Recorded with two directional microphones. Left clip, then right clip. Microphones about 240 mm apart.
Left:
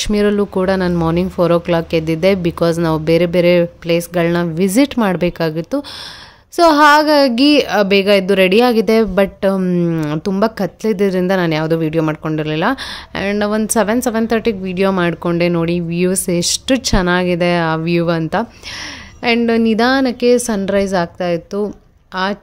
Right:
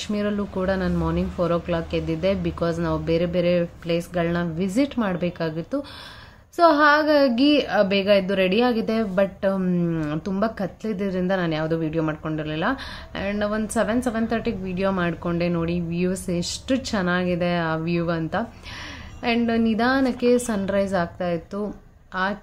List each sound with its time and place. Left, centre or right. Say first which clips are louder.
0.0 s a woman's voice: left 12 dB; left